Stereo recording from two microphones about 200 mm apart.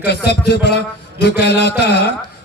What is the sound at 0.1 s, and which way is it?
Speech, 55° left (ahead or behind).